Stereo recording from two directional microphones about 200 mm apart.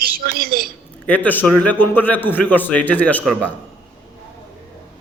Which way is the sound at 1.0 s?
5° left (ahead or behind).